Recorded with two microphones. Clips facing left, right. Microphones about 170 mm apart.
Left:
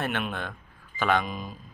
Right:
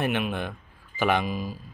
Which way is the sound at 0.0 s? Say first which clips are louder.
Right 4 dB; 15° right (ahead or behind).